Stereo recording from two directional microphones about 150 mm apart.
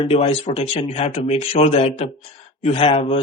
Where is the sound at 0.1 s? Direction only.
45° left (ahead or behind).